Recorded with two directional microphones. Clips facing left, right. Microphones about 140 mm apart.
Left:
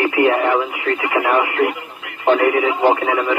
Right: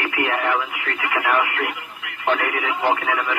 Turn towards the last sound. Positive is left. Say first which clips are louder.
# left 6 dB
turn(degrees=25)  # may be behind; listen again after turning